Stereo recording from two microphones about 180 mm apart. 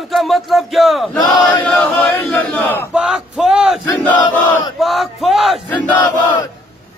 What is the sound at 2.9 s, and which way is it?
Speech, 5° right (ahead or behind).